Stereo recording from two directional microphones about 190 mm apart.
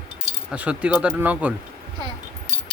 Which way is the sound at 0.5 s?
5° right (ahead or behind).